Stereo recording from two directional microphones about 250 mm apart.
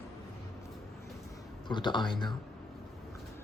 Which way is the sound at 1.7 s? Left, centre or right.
Centre.